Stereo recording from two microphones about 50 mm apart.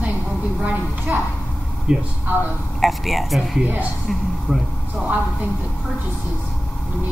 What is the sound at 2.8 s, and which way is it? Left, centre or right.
A woman's voice, centre.